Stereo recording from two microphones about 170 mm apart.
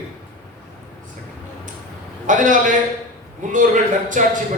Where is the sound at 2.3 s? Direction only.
50° right (ahead or behind).